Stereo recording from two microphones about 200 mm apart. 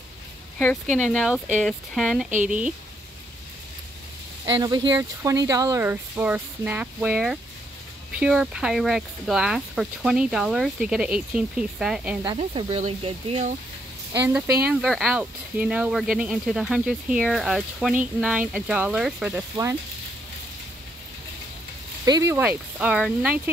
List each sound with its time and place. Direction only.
0.9 s speech: centre (ahead or behind)
4.6 s speech: 20° right (ahead or behind); by 12.2 s 5° right (ahead or behind)
12.4 s speech: 30° right (ahead or behind)
14.2 s speech: 10° right (ahead or behind)
19.5 s speech: 15° right (ahead or behind)
22.0 s speech: 15° right (ahead or behind)